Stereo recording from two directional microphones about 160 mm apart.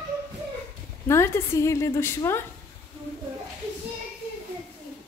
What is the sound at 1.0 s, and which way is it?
A woman's voice, 15° left (ahead or behind).